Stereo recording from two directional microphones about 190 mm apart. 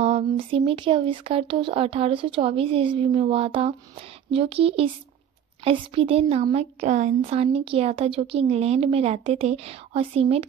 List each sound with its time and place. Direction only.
0.0 s speech: 35° right (ahead or behind)